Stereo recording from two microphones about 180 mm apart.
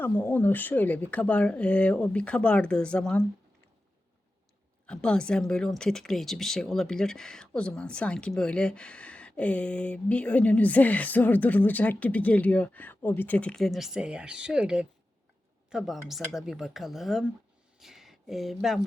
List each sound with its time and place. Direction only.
0.2 s speech: 10° left (ahead or behind)
4.9 s speech: 5° left (ahead or behind)